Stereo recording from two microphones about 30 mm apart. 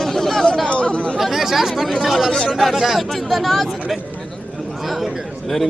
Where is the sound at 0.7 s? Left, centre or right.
Left.